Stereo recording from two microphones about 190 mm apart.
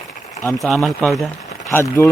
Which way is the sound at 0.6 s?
Centre (ahead or behind).